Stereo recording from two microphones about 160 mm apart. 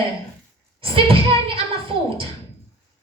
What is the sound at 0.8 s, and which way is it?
Speech, 35° right (ahead or behind).